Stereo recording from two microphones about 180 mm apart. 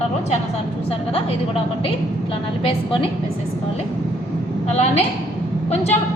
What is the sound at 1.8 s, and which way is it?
A woman's voice, 30° left (ahead or behind).